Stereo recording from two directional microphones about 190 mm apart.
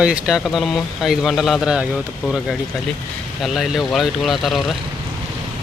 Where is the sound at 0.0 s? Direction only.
5° right (ahead or behind).